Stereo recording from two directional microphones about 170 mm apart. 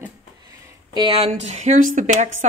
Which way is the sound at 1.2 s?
40° right (ahead or behind).